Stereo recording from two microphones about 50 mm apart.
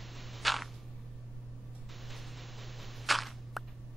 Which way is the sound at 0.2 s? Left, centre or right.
Centre.